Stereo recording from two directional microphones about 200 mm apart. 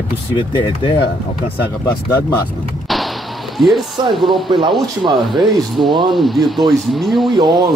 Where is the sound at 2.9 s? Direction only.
Centre (ahead or behind).